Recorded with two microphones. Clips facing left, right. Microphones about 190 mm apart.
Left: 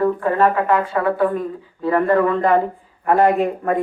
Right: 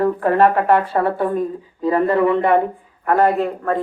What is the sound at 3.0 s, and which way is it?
Speech, 10° left (ahead or behind).